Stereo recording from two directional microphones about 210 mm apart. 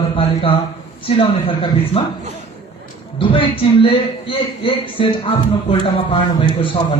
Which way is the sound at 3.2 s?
25° left (ahead or behind).